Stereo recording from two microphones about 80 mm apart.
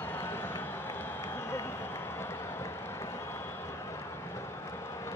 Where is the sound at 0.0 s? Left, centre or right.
Left.